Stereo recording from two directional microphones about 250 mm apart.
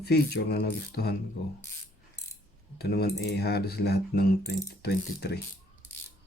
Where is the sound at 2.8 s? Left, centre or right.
Left.